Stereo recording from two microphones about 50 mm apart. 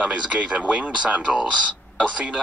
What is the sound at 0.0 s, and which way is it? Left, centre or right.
Speech, right.